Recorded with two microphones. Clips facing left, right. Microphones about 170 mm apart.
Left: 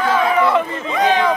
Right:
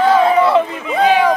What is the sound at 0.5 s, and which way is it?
Speech, 10° right (ahead or behind).